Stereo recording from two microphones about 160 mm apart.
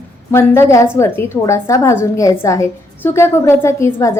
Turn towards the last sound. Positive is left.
turn(degrees=15)  # may be behind; listen again after turning